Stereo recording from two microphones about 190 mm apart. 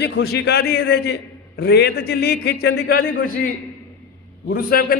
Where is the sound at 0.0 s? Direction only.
60° left (ahead or behind).